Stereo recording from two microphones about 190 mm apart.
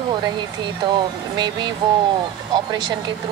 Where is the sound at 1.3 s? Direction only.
25° right (ahead or behind).